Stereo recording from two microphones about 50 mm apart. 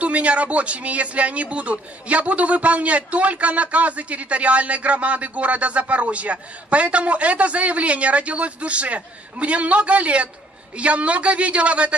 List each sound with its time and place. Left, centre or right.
0.0 s a man's voice: right